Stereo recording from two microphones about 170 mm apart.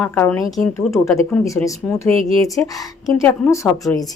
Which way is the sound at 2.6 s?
20° left (ahead or behind).